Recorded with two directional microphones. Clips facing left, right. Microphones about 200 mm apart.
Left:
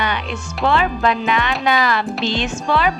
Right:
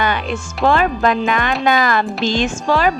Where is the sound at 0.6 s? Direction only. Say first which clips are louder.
Right 2 dB; 45° right (ahead or behind).